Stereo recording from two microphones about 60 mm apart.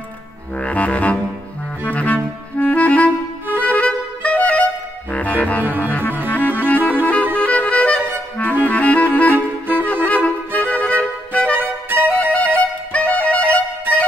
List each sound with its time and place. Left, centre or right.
0.6 s music: left
2.6 s clarinet: left
3.6 s music: left